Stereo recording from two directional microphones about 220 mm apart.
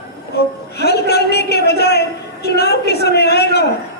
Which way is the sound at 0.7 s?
45° left (ahead or behind).